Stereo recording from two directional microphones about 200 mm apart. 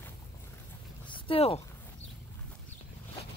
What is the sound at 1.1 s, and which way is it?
Speech, 25° left (ahead or behind).